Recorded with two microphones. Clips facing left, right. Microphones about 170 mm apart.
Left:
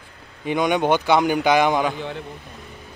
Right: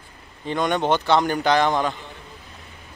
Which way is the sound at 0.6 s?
10° left (ahead or behind).